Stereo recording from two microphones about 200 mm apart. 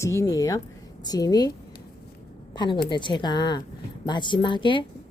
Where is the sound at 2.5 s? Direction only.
20° left (ahead or behind).